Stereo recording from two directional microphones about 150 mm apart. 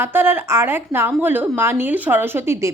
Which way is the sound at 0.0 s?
15° right (ahead or behind).